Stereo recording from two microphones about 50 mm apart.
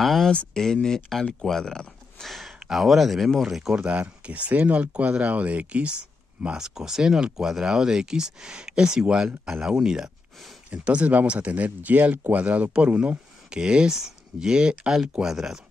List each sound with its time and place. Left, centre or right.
0.0 s speech: centre
2.2 s speech: centre
3.7 s speech: right; by 10.1 s centre
10.7 s speech: right